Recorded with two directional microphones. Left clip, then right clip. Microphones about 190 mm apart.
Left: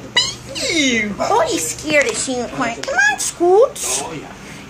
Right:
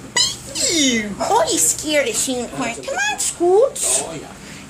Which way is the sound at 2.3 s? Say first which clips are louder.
Left 3 dB; 15° right (ahead or behind).